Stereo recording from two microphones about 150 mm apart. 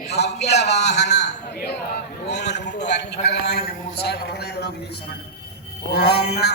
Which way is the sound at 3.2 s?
90° left.